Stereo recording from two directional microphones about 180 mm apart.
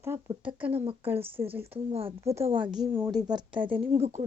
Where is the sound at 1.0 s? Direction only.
10° right (ahead or behind).